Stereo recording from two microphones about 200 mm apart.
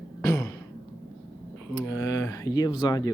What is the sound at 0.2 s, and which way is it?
Throat clearing, 15° left (ahead or behind).